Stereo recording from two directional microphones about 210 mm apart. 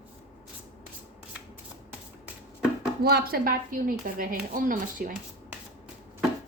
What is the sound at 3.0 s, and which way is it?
A woman's voice, 45° right (ahead or behind).